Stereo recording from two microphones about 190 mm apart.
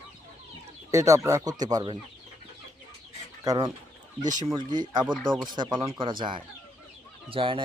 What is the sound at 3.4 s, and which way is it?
Speech, 20° right (ahead or behind).